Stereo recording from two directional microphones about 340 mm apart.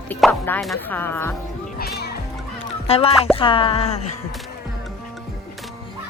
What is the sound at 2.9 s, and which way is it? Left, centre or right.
Speech, centre.